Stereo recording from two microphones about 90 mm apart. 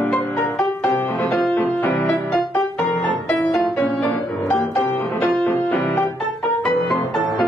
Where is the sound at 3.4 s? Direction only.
20° left (ahead or behind).